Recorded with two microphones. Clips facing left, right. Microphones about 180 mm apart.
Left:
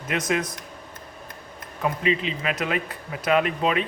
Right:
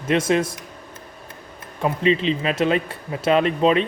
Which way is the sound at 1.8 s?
30° right (ahead or behind).